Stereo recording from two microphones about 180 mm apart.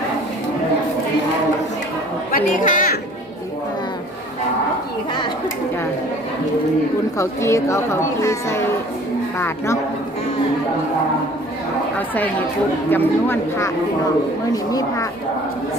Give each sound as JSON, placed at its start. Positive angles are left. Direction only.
{"t": 2.3, "sound": "a sound", "side_deg": 50}
{"t": 7.2, "sound": "speech", "side_deg": 15}
{"t": 11.9, "sound": "speech", "side_deg": 10}